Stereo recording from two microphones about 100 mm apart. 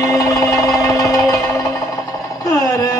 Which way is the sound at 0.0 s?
35° left (ahead or behind).